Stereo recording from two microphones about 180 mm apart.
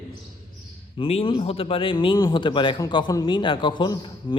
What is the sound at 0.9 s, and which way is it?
A man's voice, 30° left (ahead or behind).